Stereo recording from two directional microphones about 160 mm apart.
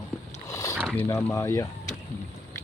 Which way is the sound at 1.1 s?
20° left (ahead or behind).